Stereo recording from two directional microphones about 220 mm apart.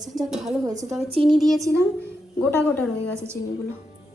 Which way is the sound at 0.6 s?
15° right (ahead or behind).